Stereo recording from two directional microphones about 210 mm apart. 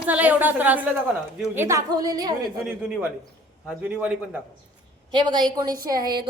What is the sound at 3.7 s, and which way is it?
Speech, 5° right (ahead or behind).